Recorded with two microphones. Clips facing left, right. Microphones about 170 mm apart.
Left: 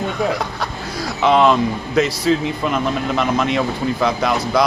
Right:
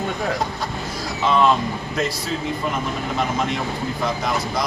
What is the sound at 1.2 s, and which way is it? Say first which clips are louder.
Speech: left 4 dB; 85° left.